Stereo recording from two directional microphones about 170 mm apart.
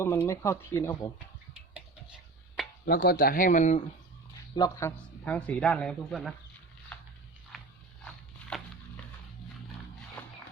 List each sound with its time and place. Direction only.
0.0 s a man's voice: 15° left (ahead or behind)
1.5 s a sound: 5° right (ahead or behind)
2.8 s speech: 60° left (ahead or behind); by 3.8 s 45° left (ahead or behind)
4.5 s a man's voice: 20° left (ahead or behind); by 6.3 s centre (ahead or behind)
6.9 s biting: 10° left (ahead or behind)
8.0 s walk: 5° left (ahead or behind)